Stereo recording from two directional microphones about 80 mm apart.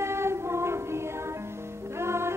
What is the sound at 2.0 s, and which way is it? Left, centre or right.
Music, right.